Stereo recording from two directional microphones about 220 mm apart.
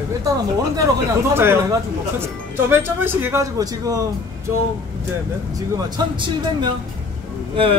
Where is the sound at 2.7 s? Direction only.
10° right (ahead or behind).